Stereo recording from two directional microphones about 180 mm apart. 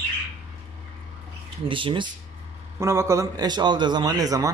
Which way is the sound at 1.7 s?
30° right (ahead or behind).